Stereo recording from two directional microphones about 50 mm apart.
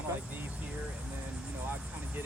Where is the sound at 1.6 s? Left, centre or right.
Right.